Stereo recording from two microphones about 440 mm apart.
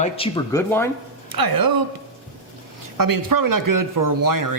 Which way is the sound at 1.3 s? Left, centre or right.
Right.